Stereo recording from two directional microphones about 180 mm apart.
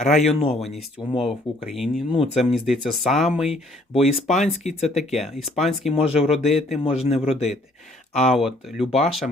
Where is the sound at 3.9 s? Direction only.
35° left (ahead or behind).